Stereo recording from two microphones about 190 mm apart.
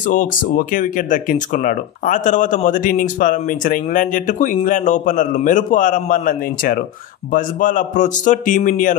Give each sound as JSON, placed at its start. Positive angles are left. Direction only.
{"t": 0.1, "sound": "speech", "side_deg": 45}